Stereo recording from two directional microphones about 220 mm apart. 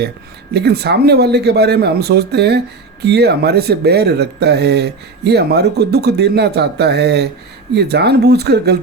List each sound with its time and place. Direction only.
0.5 s speech: 50° right (ahead or behind)